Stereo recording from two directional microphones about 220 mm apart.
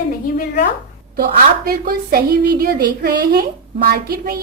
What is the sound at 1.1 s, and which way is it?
A woman's voice, 40° right (ahead or behind).